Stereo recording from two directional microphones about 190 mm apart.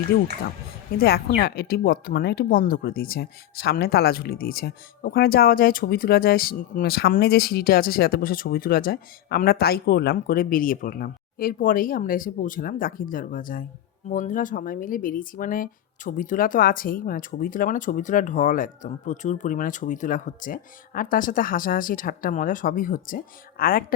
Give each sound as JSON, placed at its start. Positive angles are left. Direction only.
{"t": 0.9, "sound": "speech", "side_deg": 55}